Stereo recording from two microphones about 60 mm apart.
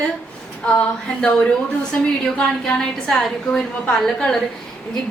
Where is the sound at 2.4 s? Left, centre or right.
Centre.